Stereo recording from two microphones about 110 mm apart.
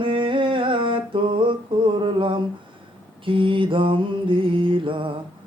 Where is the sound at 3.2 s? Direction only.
50° right (ahead or behind).